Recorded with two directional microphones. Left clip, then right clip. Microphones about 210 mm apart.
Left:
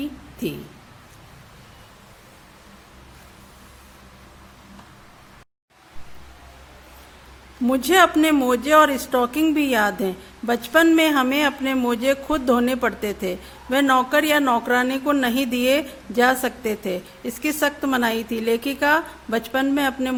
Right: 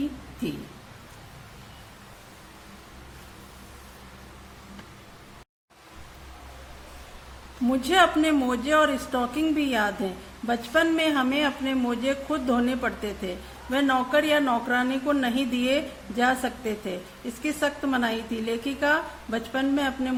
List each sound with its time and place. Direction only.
7.7 s a man's voice: 50° left (ahead or behind)